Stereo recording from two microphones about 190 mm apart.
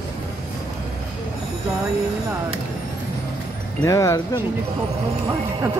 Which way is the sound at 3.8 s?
15° left (ahead or behind).